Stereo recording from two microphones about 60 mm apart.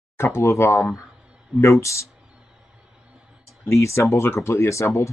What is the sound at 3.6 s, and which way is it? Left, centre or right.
Speech, left.